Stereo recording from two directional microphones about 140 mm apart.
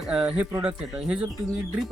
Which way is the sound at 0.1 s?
5° right (ahead or behind).